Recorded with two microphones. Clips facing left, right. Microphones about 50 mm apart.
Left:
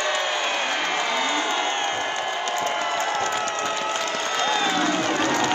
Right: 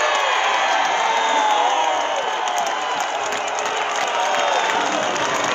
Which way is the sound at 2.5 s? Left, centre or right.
Right.